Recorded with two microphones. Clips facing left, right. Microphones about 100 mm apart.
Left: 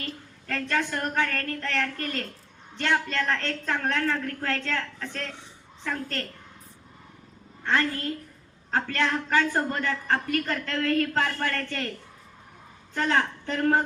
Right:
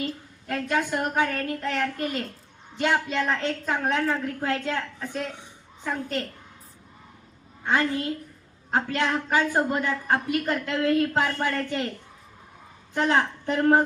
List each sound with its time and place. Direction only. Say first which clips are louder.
0.0 s a woman's voice: right 6 dB; 10° right (ahead or behind)
7.6 s a woman's voice: right 2 dB; 10° right (ahead or behind)
12.9 s a woman's voice: right 2 dB; 15° right (ahead or behind)